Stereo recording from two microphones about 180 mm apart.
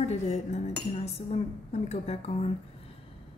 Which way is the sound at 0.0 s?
35° left (ahead or behind).